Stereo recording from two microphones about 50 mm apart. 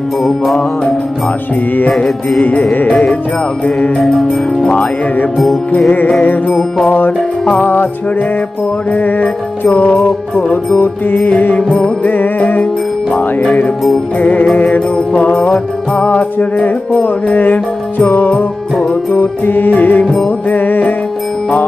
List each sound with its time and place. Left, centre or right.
2.4 s mantra: left
4.0 s music: centre
6.9 s music: left
8.9 s mantra: left
11.1 s mantra: left
12.1 s music: left
14.6 s mantra: left
15.9 s music: left